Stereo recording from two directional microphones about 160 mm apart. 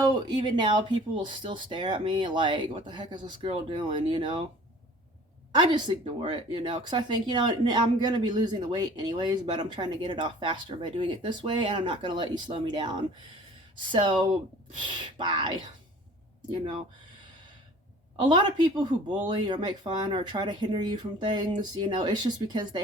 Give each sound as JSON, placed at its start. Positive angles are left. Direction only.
{"t": 0.0, "sound": "speech", "side_deg": -25}
{"t": 5.5, "sound": "speech", "side_deg": -30}
{"t": 18.2, "sound": "speech", "side_deg": -30}